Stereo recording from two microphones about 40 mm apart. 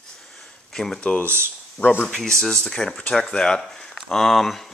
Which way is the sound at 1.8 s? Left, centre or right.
Left.